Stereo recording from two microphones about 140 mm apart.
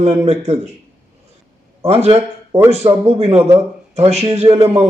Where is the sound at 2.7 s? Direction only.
50° right (ahead or behind).